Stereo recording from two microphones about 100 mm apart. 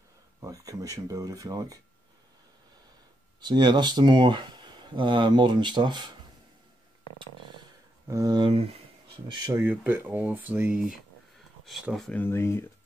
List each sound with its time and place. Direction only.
0.4 s speech: 35° right (ahead or behind)
3.3 s speech: 45° right (ahead or behind)
8.1 s speech: 35° right (ahead or behind)
8.4 s speech: 60° right (ahead or behind)
9.5 s speech: 20° right (ahead or behind)
12.1 s speech: 20° left (ahead or behind)